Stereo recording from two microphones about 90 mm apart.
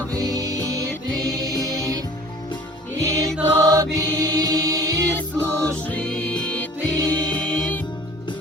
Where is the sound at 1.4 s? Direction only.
40° right (ahead or behind).